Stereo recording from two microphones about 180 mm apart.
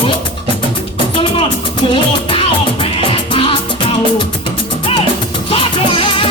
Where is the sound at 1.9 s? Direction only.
30° left (ahead or behind).